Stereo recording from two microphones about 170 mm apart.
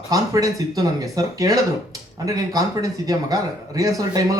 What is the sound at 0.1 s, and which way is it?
A man's voice, 20° right (ahead or behind).